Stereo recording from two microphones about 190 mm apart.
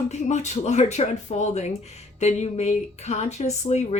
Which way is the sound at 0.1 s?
35° left (ahead or behind).